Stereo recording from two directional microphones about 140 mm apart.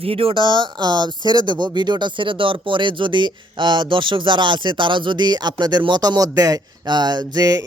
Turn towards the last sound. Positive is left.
turn(degrees=-25)  # may be behind; listen again after turning